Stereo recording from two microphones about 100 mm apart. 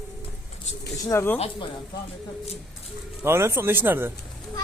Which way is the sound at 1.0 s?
25° left (ahead or behind).